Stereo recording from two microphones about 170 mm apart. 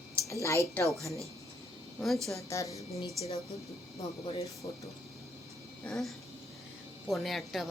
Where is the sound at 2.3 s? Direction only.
20° left (ahead or behind).